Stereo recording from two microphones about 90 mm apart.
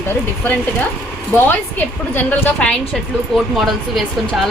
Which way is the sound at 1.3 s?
25° left (ahead or behind).